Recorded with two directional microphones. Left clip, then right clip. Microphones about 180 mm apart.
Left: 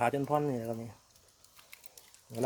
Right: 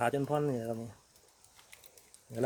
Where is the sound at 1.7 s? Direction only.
10° right (ahead or behind).